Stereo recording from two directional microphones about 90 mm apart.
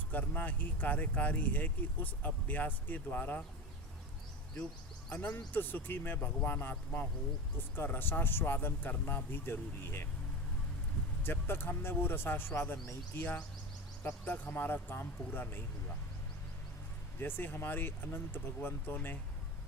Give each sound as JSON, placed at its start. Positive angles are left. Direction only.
{"t": 0.1, "sound": "speech", "side_deg": 20}
{"t": 5.0, "sound": "speech", "side_deg": 15}
{"t": 11.2, "sound": "speech", "side_deg": 25}
{"t": 17.2, "sound": "speech", "side_deg": 25}